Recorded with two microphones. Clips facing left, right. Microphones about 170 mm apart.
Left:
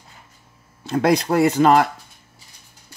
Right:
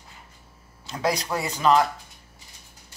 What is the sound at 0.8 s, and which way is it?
Speech, 60° left (ahead or behind).